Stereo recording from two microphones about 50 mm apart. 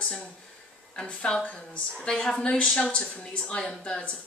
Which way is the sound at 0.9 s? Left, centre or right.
Left.